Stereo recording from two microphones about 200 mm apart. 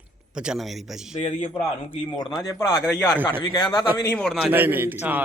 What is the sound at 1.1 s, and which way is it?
Speech, 35° left (ahead or behind).